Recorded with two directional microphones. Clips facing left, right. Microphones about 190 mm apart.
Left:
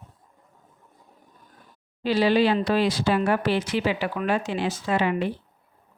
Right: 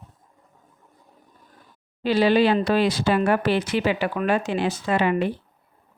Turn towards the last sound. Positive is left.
turn(degrees=-55)  # may be behind; listen again after turning